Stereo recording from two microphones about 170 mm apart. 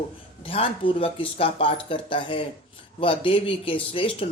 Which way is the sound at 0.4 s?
30° left (ahead or behind).